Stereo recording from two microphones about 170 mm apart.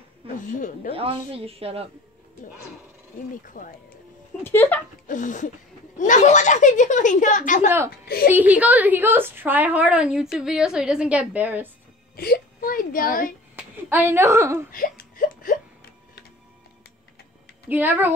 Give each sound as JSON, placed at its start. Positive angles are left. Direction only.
{"t": 0.4, "sound": "speech", "side_deg": 50}
{"t": 0.9, "sound": "a woman's voice", "side_deg": -35}
{"t": 3.6, "sound": "speech", "side_deg": 50}
{"t": 4.4, "sound": "speech", "side_deg": 10}
{"t": 5.0, "sound": "speech", "side_deg": 50}
{"t": 8.3, "sound": "a woman's voice", "side_deg": -10}
{"t": 12.2, "sound": "speech", "side_deg": 60}
{"t": 13.8, "sound": "a woman's voice", "side_deg": -15}
{"t": 14.7, "sound": "a sound", "side_deg": 55}
{"t": 17.6, "sound": "a woman's voice", "side_deg": -10}